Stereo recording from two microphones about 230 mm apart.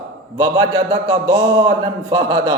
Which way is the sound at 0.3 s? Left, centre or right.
Centre.